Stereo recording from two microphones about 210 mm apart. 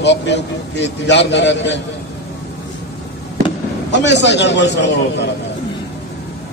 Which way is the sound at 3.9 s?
55° left (ahead or behind).